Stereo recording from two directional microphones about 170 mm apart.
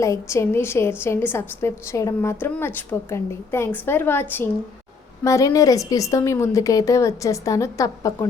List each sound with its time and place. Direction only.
0.0 s a woman's voice: 15° left (ahead or behind)